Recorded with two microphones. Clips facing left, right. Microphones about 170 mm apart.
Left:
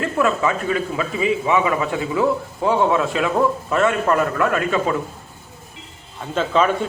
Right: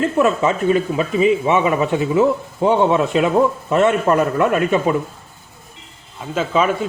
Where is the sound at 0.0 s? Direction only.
20° right (ahead or behind).